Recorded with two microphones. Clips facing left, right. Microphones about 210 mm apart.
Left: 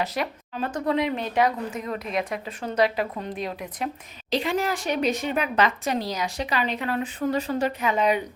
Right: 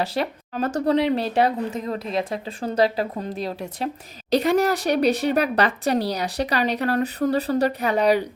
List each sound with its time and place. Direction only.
0.0 s speech: 30° right (ahead or behind)